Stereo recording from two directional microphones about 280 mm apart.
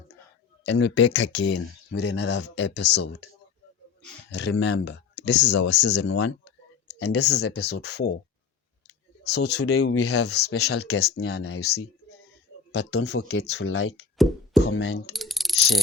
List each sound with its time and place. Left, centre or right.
0.6 s speech: left
4.3 s speech: left
9.2 s speech: left
10.2 s speech: left
14.2 s music: centre
14.6 s speech: left
15.1 s mechanisms: centre